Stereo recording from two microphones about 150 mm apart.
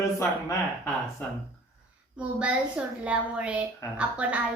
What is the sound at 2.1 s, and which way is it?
A woman's voice, 10° right (ahead or behind).